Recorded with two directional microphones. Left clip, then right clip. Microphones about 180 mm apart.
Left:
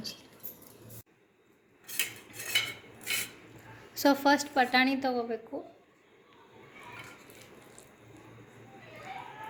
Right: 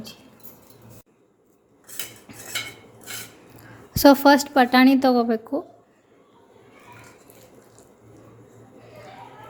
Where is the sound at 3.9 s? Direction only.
55° right (ahead or behind).